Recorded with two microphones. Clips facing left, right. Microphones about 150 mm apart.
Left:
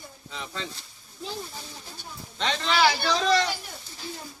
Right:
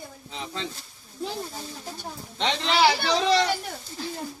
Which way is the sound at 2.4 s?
20° right (ahead or behind).